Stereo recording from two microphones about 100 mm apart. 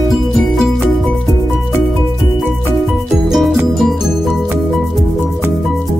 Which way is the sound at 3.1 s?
Centre (ahead or behind).